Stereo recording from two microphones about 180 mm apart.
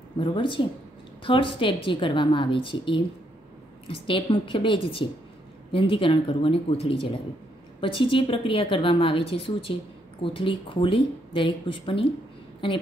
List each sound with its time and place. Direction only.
0.2 s a woman's voice: 25° left (ahead or behind)